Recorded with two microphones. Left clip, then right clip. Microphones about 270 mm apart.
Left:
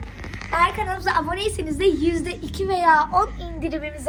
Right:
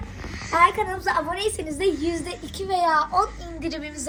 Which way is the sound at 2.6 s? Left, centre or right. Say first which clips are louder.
Left 4 dB; left.